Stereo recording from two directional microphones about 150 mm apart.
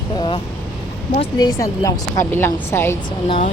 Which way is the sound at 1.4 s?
20° left (ahead or behind).